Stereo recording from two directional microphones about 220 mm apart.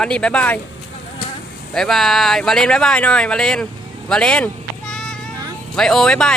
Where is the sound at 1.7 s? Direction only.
Centre (ahead or behind).